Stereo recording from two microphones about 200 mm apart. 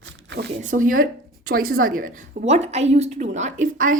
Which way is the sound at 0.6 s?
40° right (ahead or behind).